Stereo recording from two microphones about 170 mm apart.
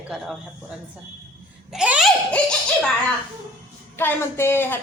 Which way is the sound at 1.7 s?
5° right (ahead or behind).